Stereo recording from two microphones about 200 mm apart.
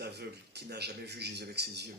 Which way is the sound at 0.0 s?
55° right (ahead or behind).